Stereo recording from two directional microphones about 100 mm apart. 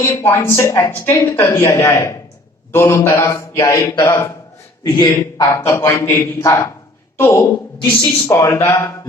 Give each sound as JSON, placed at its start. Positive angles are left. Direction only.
{"t": 0.0, "sound": "a man's voice", "side_deg": 25}
{"t": 5.5, "sound": "a man's voice", "side_deg": 30}